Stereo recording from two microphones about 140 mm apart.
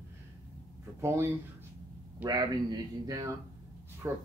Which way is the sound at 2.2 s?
30° right (ahead or behind).